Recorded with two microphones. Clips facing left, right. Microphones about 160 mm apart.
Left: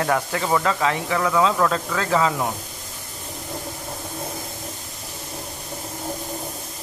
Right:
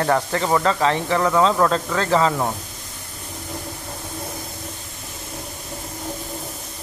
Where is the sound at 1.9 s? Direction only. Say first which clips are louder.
Right 2 dB; 5° left (ahead or behind).